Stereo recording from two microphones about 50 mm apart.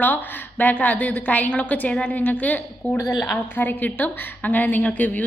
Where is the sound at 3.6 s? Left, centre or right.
Left.